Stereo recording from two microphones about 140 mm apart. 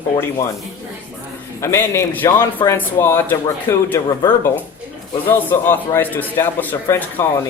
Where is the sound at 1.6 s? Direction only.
20° left (ahead or behind).